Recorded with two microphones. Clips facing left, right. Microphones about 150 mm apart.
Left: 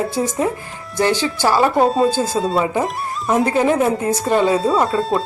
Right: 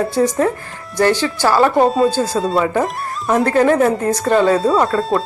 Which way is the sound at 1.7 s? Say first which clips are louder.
Right 2 dB; centre (ahead or behind).